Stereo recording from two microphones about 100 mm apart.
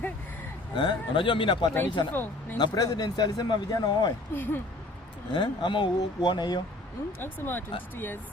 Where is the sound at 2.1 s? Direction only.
20° left (ahead or behind).